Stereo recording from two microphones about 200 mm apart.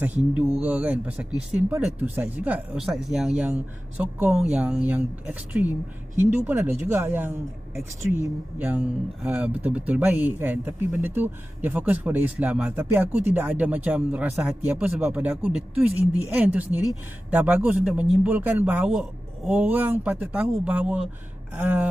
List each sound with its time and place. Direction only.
0.3 s speech: 10° right (ahead or behind)